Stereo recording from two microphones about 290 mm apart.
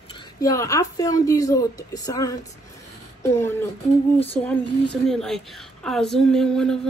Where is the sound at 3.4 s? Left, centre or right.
Centre.